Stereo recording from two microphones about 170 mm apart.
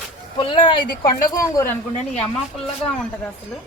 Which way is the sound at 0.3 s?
30° left (ahead or behind).